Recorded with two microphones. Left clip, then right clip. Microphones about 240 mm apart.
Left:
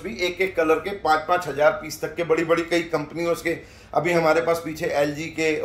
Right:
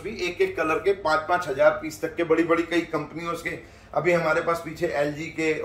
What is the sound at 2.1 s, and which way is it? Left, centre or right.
A man's voice, left.